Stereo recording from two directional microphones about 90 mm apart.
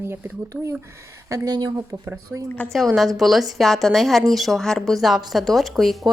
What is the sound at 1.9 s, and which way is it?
Speech, 30° right (ahead or behind).